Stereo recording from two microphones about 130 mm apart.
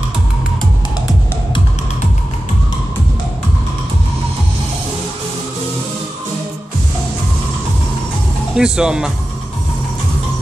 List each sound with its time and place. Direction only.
8.5 s speech: 5° right (ahead or behind)